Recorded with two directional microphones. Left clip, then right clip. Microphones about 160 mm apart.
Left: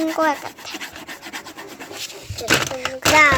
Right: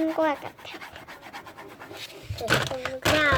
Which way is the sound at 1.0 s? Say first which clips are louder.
Left 8 dB; 25° left (ahead or behind).